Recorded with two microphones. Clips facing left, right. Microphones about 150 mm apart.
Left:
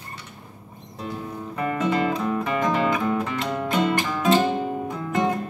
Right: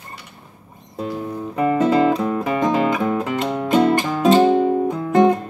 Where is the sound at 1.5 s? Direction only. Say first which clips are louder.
Right 7 dB; 25° right (ahead or behind).